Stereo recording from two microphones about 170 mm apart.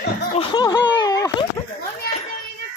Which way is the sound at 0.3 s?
30° left (ahead or behind).